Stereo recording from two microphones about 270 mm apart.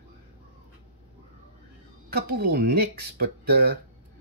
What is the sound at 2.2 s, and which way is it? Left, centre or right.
Speech, right.